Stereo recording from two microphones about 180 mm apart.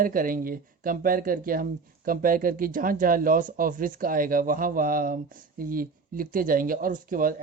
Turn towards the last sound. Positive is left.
turn(degrees=-50)  # may be behind; listen again after turning